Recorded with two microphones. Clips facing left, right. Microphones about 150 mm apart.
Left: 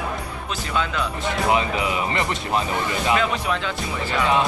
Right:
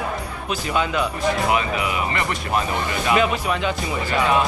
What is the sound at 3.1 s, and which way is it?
Speech, 15° right (ahead or behind).